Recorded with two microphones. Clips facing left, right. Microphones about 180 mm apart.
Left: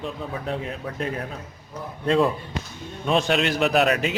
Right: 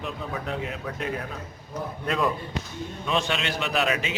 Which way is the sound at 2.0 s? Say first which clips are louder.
Left 6 dB; 30° left (ahead or behind).